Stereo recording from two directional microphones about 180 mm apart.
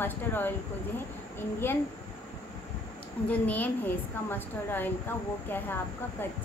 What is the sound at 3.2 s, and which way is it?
A woman's voice, 10° left (ahead or behind).